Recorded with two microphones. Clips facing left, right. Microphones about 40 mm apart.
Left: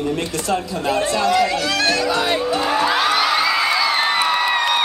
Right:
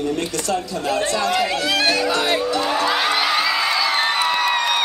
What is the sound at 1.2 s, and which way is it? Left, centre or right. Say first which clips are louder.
Speech: left 2 dB; centre.